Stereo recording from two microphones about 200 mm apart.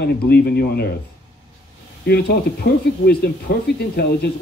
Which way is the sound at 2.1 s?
55° left (ahead or behind).